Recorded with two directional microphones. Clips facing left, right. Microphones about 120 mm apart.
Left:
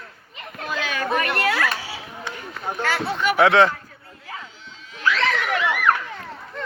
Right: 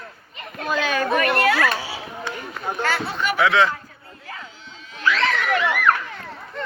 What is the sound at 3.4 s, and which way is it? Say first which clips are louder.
Speech: left 3 dB; 55° left (ahead or behind).